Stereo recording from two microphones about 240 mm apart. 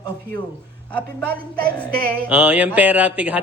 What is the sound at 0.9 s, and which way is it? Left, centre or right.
A man's voice, centre.